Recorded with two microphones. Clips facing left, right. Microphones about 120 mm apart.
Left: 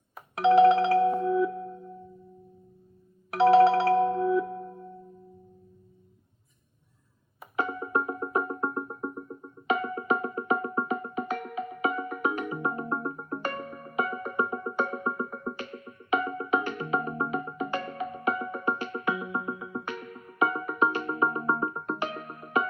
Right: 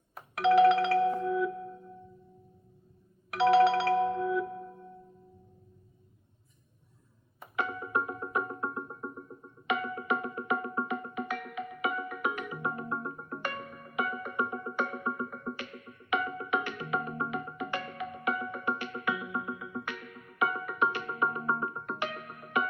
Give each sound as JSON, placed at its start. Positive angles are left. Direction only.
{"t": 0.3, "sound": "music", "side_deg": 25}
{"t": 3.3, "sound": "music", "side_deg": 35}
{"t": 7.5, "sound": "music", "side_deg": 35}